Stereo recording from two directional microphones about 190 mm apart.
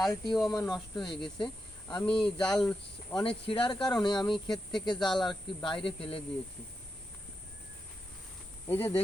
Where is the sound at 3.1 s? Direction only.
25° left (ahead or behind).